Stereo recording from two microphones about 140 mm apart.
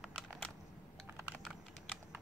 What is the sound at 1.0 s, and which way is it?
Typing, 15° right (ahead or behind).